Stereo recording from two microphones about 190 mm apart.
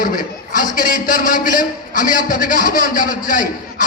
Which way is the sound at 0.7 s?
45° left (ahead or behind).